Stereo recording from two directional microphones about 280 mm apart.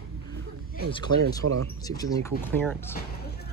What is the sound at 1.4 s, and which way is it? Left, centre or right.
Speech, right.